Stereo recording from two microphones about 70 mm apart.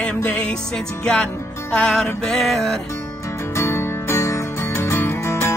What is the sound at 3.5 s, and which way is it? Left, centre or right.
Music, left.